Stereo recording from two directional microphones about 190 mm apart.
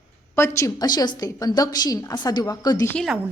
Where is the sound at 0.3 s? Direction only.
15° left (ahead or behind).